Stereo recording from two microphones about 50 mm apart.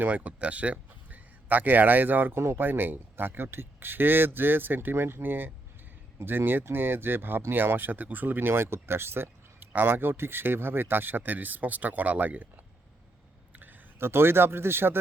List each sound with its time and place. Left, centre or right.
0.0 s a man's voice: right
2.3 s speech: right
2.6 s speech: right
14.0 s speech: right